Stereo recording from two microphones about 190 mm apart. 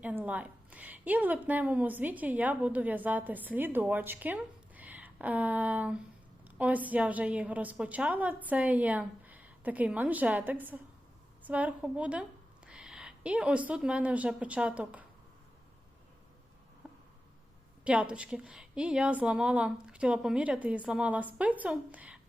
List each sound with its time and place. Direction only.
0.0 s a woman's voice: 10° right (ahead or behind)
16.8 s insect: 5° right (ahead or behind)
17.8 s a woman's voice: 5° right (ahead or behind)